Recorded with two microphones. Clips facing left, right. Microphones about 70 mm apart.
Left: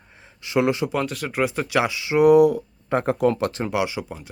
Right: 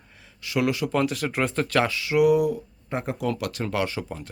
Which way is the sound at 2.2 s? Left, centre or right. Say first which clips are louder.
Left 11 dB; left.